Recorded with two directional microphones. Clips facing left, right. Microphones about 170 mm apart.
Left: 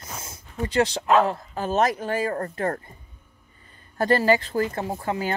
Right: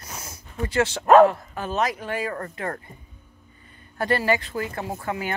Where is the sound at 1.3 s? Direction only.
35° left (ahead or behind).